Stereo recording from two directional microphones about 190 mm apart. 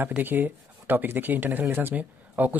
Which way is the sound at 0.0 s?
10° right (ahead or behind).